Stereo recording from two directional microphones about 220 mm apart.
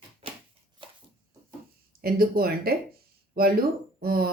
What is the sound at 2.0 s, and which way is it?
Speech, 45° right (ahead or behind).